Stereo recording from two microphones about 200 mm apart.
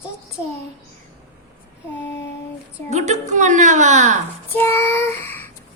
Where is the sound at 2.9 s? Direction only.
35° right (ahead or behind).